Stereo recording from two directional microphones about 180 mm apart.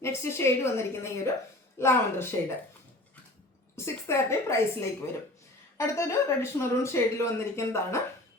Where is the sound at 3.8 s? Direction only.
15° left (ahead or behind).